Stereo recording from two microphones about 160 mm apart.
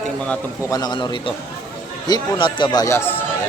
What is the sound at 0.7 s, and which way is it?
Speech, 25° left (ahead or behind).